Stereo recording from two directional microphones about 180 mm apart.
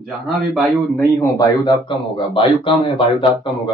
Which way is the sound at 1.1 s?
15° left (ahead or behind).